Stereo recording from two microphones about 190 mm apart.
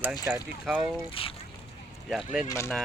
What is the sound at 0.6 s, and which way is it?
Speech, 5° right (ahead or behind).